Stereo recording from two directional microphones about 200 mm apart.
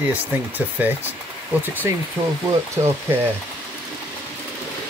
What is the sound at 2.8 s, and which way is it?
Speech, 25° right (ahead or behind).